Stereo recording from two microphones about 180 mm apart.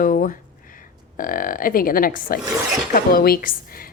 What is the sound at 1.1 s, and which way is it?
A woman's voice, 50° left (ahead or behind).